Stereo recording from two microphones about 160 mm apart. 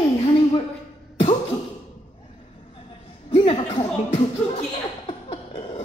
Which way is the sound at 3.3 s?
35° left (ahead or behind).